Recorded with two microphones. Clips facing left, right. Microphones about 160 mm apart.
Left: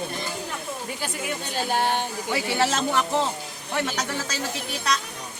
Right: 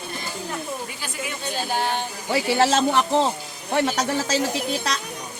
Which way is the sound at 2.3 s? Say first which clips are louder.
Right 5 dB; 35° right (ahead or behind).